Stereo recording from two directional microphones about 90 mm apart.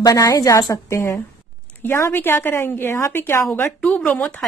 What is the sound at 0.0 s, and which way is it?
A woman's voice, 40° left (ahead or behind).